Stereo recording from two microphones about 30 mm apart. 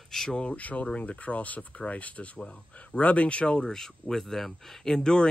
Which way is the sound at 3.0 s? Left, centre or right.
Left.